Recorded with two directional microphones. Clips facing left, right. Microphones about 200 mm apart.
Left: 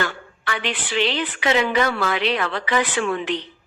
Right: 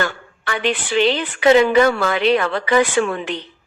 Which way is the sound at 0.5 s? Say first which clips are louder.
Right 6 dB; 50° right (ahead or behind).